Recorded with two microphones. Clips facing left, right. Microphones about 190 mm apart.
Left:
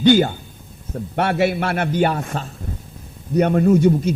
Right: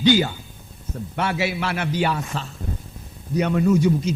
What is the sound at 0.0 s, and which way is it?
A man's voice, 50° left (ahead or behind).